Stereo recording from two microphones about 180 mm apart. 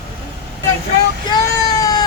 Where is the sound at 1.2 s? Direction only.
20° left (ahead or behind).